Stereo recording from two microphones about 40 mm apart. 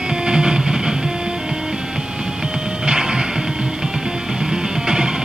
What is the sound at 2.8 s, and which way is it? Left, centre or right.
Music, right.